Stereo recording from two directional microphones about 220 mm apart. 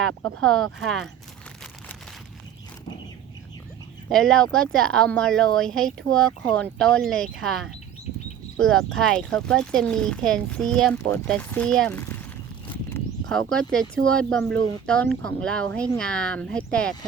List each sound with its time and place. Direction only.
0.1 s speech: 70° right (ahead or behind)
0.4 s speech: centre (ahead or behind)
4.1 s speech: 5° left (ahead or behind)